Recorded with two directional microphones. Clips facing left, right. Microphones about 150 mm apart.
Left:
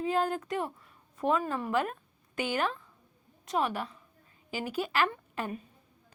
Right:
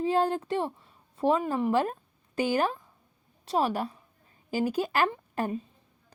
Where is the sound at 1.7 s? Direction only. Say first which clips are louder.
Right 4 dB; 35° right (ahead or behind).